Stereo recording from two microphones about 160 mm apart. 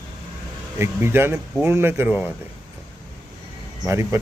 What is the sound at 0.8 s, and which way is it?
A man's voice, 15° right (ahead or behind).